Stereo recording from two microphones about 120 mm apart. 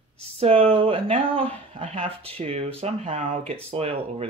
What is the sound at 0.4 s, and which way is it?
Speech, 50° right (ahead or behind).